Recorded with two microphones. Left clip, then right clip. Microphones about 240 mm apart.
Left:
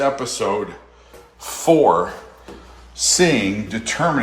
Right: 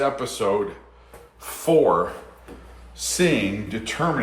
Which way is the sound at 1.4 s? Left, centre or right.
Centre.